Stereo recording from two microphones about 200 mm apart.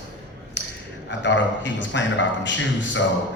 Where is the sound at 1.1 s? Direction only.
60° left (ahead or behind).